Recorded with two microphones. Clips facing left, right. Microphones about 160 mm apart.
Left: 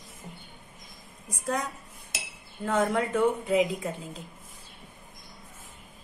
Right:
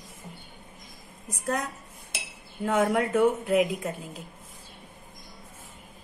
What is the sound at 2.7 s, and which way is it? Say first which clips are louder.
A woman's voice: right 2 dB; 10° right (ahead or behind).